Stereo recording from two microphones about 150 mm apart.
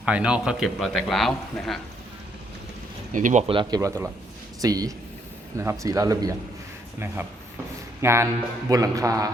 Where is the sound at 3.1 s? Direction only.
60° right (ahead or behind).